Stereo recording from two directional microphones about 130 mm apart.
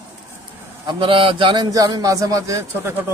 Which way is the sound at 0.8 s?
40° right (ahead or behind).